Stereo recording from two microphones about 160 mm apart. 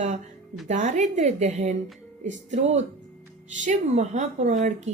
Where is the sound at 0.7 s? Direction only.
45° right (ahead or behind).